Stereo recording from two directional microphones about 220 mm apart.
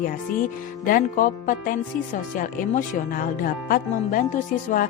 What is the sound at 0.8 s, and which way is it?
Speech, 40° left (ahead or behind).